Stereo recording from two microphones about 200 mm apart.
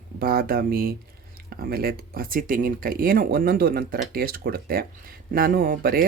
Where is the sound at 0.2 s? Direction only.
50° right (ahead or behind).